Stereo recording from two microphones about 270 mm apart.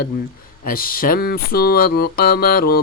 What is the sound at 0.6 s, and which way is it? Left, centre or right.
Mantra, left.